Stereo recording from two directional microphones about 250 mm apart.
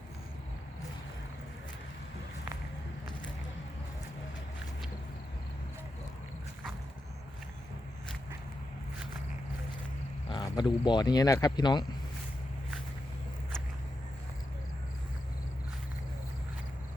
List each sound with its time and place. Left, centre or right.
10.2 s speech: centre